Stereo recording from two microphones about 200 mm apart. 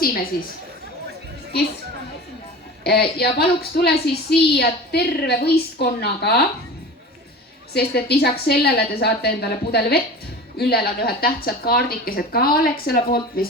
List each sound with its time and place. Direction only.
2.8 s a woman's voice: 55° left (ahead or behind)
7.7 s a woman's voice: 55° left (ahead or behind)